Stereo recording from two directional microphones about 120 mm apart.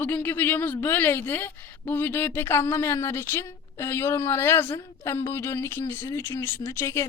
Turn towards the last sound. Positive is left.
turn(degrees=25)  # may be behind; listen again after turning